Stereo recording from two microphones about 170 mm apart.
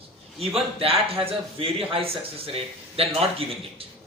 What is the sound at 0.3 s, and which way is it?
A man's voice, 35° right (ahead or behind).